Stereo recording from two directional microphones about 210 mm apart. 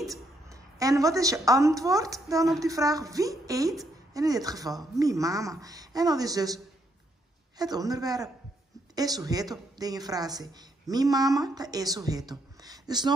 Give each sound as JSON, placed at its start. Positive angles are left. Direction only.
{"t": 0.5, "sound": "a woman's voice", "side_deg": -15}